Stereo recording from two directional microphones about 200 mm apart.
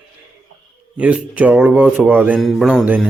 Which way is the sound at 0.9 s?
5° right (ahead or behind).